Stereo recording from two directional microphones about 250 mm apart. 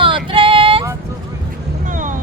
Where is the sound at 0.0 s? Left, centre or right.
Right.